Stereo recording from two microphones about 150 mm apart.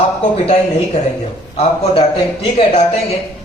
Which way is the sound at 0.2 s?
50° left (ahead or behind).